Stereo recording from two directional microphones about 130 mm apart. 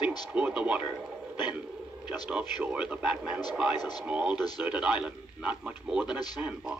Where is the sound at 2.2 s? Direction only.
10° right (ahead or behind).